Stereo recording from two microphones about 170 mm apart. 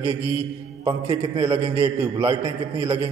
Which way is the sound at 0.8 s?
25° right (ahead or behind).